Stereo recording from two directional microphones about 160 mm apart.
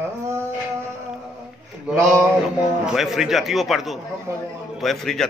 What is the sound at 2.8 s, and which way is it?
A man's voice, centre (ahead or behind).